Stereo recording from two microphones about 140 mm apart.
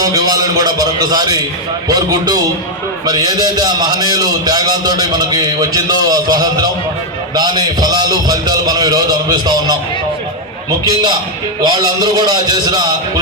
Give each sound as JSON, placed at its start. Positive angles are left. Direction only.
{"t": 0.0, "sound": "a man's voice", "side_deg": -25}
{"t": 10.8, "sound": "a man's voice", "side_deg": -30}